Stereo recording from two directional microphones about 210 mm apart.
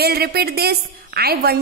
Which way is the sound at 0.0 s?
50° right (ahead or behind).